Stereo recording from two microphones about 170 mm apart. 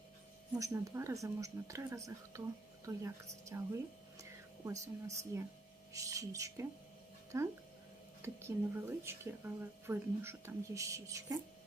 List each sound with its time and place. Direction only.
0.6 s speech: 20° right (ahead or behind)